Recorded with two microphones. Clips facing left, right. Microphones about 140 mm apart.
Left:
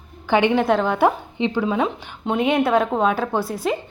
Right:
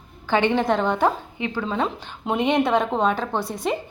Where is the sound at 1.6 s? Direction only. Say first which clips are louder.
Left 4 dB; 5° left (ahead or behind).